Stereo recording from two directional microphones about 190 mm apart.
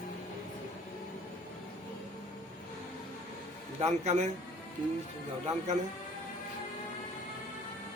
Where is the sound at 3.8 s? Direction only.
35° right (ahead or behind).